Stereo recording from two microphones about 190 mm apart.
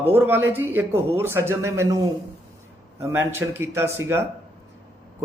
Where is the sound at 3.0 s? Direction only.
15° right (ahead or behind).